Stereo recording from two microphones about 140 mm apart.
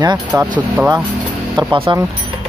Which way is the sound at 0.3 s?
20° right (ahead or behind).